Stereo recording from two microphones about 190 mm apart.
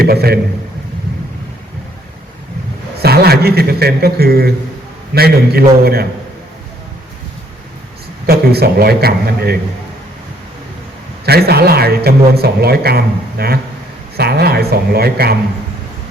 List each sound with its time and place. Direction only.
0.0 s speech: 55° right (ahead or behind)
3.0 s a man's voice: 55° right (ahead or behind)
8.3 s speech: 55° right (ahead or behind)
11.3 s a man's voice: 55° right (ahead or behind)